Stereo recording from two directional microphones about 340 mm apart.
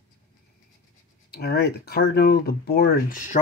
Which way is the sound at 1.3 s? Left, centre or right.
Left.